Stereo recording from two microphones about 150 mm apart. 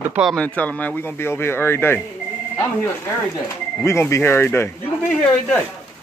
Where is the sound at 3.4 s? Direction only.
20° left (ahead or behind).